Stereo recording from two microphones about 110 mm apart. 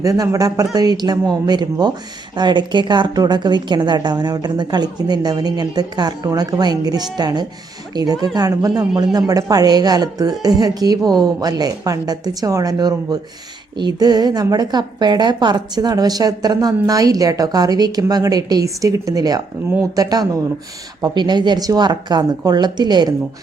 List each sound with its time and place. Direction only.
0.0 s a woman's voice: 30° right (ahead or behind)